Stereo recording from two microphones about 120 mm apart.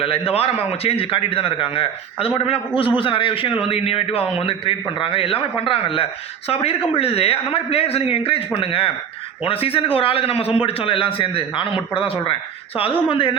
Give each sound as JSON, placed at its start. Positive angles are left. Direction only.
{"t": 0.0, "sound": "a man's voice", "side_deg": 55}